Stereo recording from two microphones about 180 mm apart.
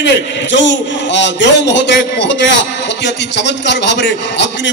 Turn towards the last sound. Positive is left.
turn(degrees=75)  # may be behind; listen again after turning